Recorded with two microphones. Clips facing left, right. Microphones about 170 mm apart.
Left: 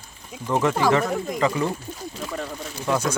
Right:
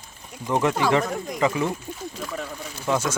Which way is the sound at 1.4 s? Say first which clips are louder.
Right 1 dB; 15° right (ahead or behind).